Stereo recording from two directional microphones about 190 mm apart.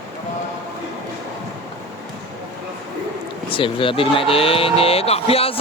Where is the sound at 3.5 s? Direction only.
25° left (ahead or behind).